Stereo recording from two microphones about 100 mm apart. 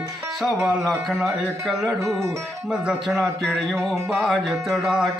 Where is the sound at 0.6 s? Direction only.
Centre (ahead or behind).